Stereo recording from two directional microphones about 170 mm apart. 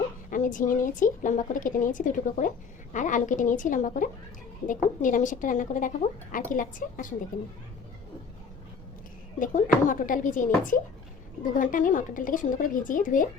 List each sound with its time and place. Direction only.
0.3 s a woman's voice: 50° left (ahead or behind)
9.4 s a woman's voice: 50° left (ahead or behind)